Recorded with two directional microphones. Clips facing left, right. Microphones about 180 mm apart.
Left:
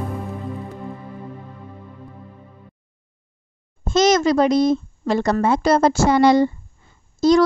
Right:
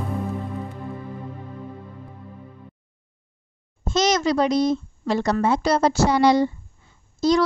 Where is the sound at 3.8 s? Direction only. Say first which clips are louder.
Left 5 dB; 50° left (ahead or behind).